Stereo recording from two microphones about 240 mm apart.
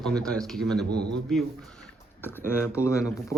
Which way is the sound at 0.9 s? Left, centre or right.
Right.